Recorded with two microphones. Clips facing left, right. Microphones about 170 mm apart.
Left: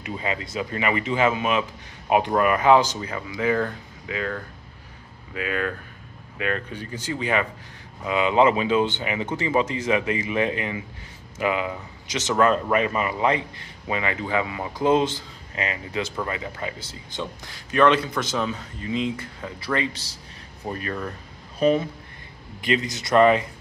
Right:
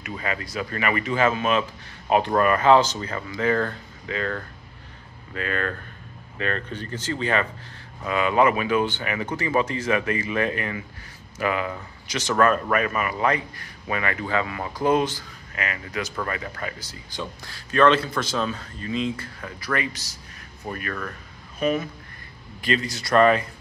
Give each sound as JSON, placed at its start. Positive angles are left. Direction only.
{"t": 0.1, "sound": "speech", "side_deg": 20}
{"t": 22.6, "sound": "speech", "side_deg": 20}